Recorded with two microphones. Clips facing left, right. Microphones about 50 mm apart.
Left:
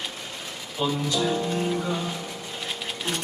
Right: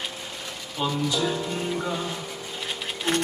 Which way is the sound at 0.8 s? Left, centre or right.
Centre.